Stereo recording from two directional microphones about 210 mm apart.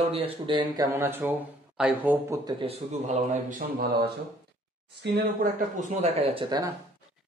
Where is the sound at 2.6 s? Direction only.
30° right (ahead or behind); by 5.5 s 50° right (ahead or behind).